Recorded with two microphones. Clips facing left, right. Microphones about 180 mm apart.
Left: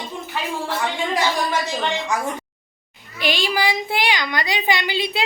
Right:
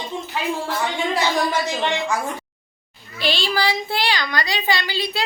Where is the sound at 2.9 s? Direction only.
15° left (ahead or behind).